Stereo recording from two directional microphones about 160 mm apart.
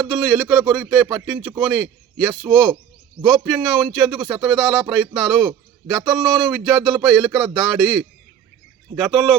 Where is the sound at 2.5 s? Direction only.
15° right (ahead or behind).